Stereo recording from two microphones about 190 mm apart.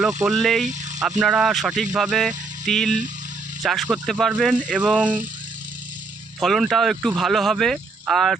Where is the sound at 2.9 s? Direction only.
40° right (ahead or behind).